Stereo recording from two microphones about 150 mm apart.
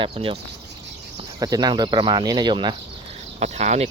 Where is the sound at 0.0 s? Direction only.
35° right (ahead or behind).